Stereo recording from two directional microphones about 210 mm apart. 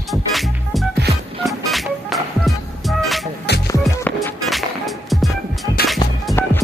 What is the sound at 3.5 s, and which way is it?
Music, 50° left (ahead or behind).